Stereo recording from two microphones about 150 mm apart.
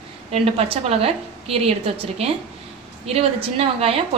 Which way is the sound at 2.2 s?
45° right (ahead or behind).